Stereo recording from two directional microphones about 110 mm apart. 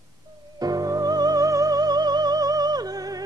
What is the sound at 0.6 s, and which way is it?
Music, 35° right (ahead or behind).